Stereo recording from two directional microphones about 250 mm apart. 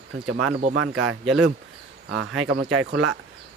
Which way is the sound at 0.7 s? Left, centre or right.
Right.